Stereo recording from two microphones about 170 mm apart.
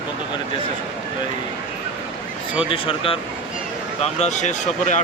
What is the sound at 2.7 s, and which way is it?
Speech, 30° left (ahead or behind).